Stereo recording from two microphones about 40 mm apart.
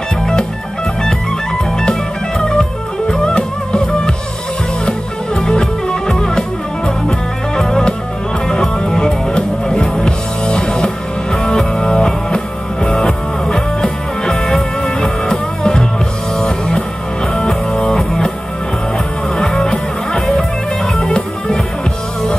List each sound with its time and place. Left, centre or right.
1.8 s music: centre
19.3 s music: centre